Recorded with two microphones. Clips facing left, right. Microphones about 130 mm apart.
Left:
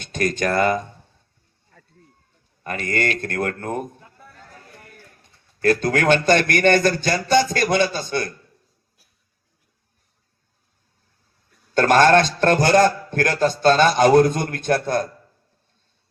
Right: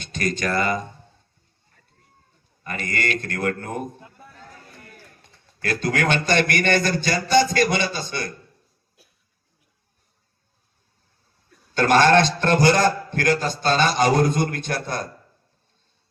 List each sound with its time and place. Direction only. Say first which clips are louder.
0.0 s a man's voice: left 3 dB; 50° left (ahead or behind)
2.6 s a man's voice: left 3 dB; 55° left (ahead or behind)
5.6 s a man's voice: left 5 dB; 45° left (ahead or behind)
11.7 s a man's voice: left 2 dB; 45° left (ahead or behind)